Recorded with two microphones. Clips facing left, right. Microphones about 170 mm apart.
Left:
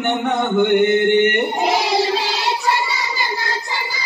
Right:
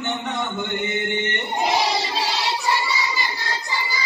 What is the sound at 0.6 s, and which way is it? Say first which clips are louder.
Speech: left 12 dB; 65° left (ahead or behind).